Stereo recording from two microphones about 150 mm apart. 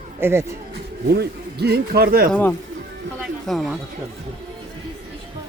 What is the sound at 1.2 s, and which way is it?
A man's voice, 90° right.